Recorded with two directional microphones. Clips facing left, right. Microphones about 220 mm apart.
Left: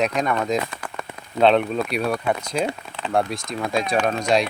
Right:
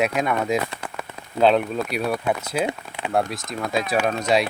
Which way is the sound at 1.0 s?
5° right (ahead or behind).